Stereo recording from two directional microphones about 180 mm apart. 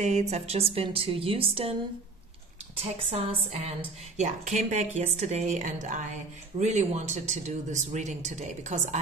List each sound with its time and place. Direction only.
0.0 s speech: 40° right (ahead or behind)
4.2 s speech: 45° right (ahead or behind)